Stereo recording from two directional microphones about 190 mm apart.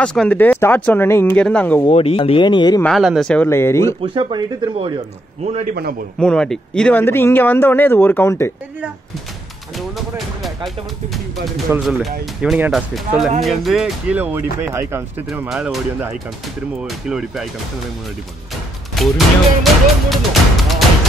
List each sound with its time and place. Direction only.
0.0 s speech: 5° left (ahead or behind)
1.9 s speech: 30° left (ahead or behind)
2.8 s speech: centre (ahead or behind)
4.0 s a man's voice: 25° right (ahead or behind)
6.1 s speech: 5° left (ahead or behind)
9.8 s speech: centre (ahead or behind)
11.7 s speech: 5° right (ahead or behind)
18.9 s speech: centre (ahead or behind)